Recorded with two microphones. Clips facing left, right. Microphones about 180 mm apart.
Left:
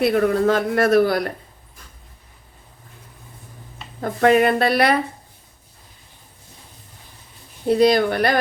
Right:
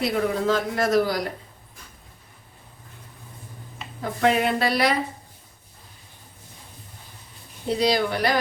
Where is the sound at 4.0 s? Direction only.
50° left (ahead or behind).